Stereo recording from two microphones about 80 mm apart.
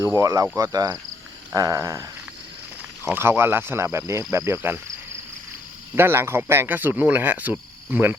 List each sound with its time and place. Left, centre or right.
0.0 s a sound: right
3.1 s speech: right
3.9 s cricket: right
6.0 s speech: right